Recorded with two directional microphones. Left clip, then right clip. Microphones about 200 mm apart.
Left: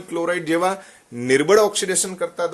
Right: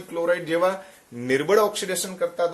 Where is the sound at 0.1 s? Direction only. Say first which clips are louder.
Left 2 dB; 45° left (ahead or behind).